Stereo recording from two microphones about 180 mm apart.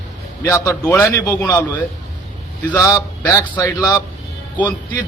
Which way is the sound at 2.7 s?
15° left (ahead or behind).